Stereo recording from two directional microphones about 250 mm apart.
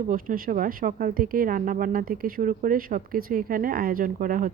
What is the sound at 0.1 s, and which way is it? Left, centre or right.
A woman's voice, right.